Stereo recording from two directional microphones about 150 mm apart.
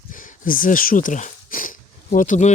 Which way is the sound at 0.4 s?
65° left (ahead or behind).